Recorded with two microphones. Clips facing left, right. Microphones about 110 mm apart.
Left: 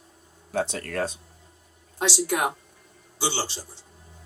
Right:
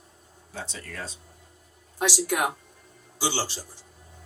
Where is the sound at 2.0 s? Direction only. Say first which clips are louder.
Left 1 dB; 20° left (ahead or behind).